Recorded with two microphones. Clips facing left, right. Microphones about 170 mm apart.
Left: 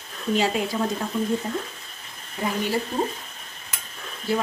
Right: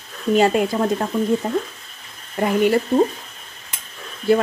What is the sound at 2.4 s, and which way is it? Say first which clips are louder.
Speech: right 7 dB; 65° right (ahead or behind).